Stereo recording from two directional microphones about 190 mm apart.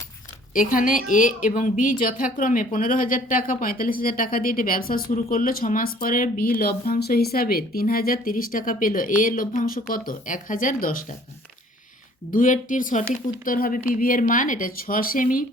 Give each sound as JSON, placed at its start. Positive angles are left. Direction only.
{"t": 0.5, "sound": "a woman's voice", "side_deg": 45}
{"t": 12.3, "sound": "a woman's voice", "side_deg": 45}